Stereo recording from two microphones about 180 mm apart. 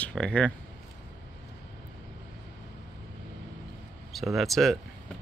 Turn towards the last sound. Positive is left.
turn(degrees=0)  # may be behind; listen again after turning